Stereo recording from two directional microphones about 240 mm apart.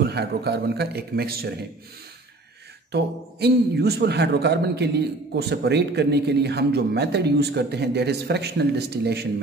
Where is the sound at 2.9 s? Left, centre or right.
Right.